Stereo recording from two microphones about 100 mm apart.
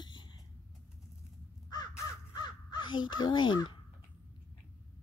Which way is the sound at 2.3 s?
45° left (ahead or behind).